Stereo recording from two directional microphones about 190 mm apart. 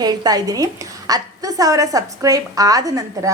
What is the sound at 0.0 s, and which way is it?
A woman's voice, 20° right (ahead or behind).